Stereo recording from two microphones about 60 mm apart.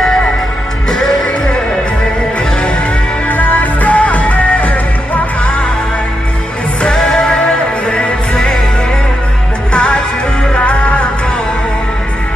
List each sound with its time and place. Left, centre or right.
0.8 s music: centre
3.3 s music: left
6.8 s music: centre
9.7 s music: centre